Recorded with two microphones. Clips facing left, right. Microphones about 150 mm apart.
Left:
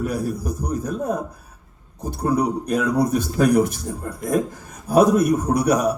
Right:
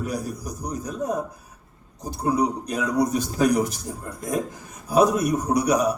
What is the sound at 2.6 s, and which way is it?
Speech, 55° left (ahead or behind).